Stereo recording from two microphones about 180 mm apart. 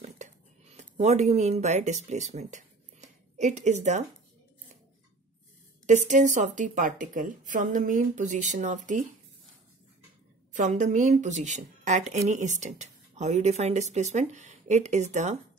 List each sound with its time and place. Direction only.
0.0 s a sound: 40° right (ahead or behind)
5.9 s a woman's voice: 40° right (ahead or behind)
10.5 s a woman's voice: 45° right (ahead or behind)